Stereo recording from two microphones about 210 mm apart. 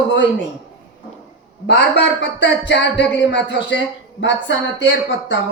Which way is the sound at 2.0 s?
55° left (ahead or behind).